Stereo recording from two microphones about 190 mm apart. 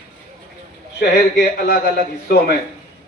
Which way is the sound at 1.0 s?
55° left (ahead or behind).